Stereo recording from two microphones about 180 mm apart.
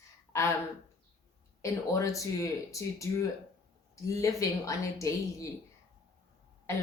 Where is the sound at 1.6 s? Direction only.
20° left (ahead or behind).